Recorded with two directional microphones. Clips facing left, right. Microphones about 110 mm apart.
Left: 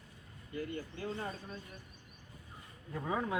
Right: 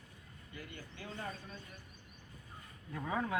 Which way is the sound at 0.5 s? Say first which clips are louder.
Left 10 dB; 35° left (ahead or behind).